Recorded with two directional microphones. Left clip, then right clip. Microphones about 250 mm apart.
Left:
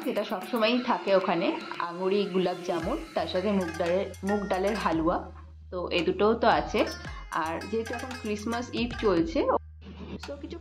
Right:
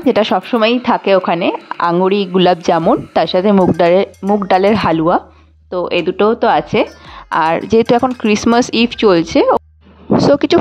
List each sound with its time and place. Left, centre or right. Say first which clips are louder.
0.1 s a woman's voice: right 18 dB; right